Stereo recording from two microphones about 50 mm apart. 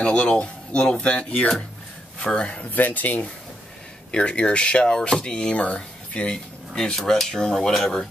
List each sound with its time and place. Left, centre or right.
0.0 s speech: centre
2.7 s speech: left
4.1 s speech: left